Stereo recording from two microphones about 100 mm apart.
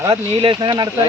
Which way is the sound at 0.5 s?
45° right (ahead or behind).